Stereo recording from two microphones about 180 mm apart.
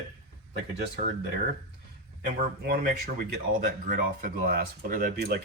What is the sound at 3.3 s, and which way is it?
Speech, 50° right (ahead or behind).